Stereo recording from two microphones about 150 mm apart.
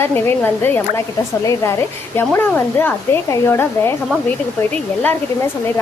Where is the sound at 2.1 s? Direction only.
15° left (ahead or behind).